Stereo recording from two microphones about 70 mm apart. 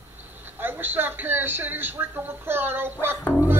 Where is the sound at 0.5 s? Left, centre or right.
Right.